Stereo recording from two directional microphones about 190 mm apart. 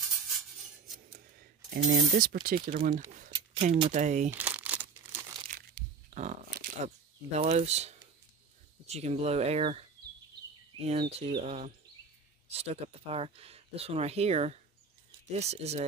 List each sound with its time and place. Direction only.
1.7 s speech: 50° right (ahead or behind)
3.3 s a sound: 30° right (ahead or behind)
3.9 s speech: 40° right (ahead or behind)
4.3 s crumpling: 10° right (ahead or behind)
5.8 s a sound: 40° right (ahead or behind)
8.8 s speech: 35° right (ahead or behind)
10.9 s speech: 35° right (ahead or behind)